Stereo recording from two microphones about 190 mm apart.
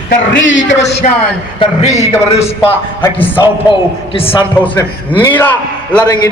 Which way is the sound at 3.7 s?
30° left (ahead or behind).